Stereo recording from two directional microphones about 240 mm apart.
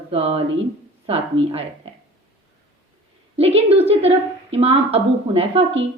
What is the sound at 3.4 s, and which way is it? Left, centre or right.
A woman's voice, right.